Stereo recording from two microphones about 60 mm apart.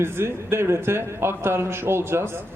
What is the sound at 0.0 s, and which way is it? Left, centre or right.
A man's voice, right.